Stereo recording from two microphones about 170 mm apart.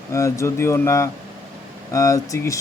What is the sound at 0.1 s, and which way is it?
Speech, 15° left (ahead or behind).